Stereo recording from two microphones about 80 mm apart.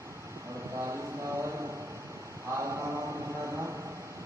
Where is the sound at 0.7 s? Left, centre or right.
Right.